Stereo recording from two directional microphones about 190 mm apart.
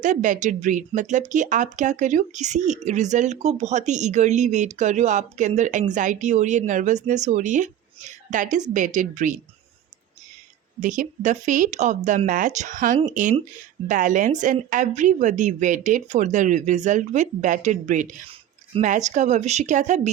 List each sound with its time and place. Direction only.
0.0 s speech: 40° right (ahead or behind)
10.8 s speech: 45° right (ahead or behind)